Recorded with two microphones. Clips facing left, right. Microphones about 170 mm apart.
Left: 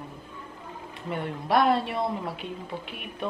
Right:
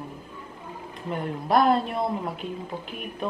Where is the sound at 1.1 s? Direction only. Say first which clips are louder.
Right 2 dB; 40° right (ahead or behind).